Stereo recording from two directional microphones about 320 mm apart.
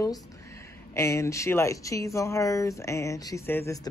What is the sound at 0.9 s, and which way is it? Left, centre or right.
Speech, centre.